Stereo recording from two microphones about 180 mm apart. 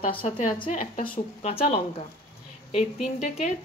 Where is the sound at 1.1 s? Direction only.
35° left (ahead or behind).